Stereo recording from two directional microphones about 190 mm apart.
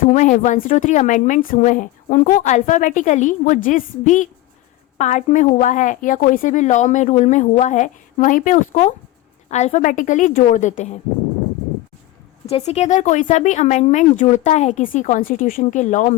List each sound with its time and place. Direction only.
0.0 s speech: 40° left (ahead or behind)
12.5 s speech: 35° left (ahead or behind)